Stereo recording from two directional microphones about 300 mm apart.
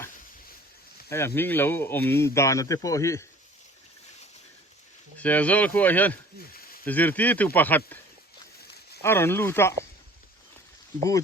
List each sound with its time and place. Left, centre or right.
1.4 s speech: centre
5.1 s speech: centre
6.5 s a sound: left
6.8 s speech: centre
9.0 s speech: centre